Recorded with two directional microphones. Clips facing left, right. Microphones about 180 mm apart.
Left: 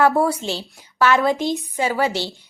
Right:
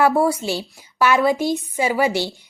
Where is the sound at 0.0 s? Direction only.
10° right (ahead or behind).